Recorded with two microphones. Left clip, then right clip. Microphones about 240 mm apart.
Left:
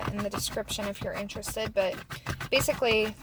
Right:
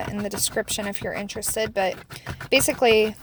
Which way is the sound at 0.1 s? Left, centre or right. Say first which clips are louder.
Right 5 dB; right.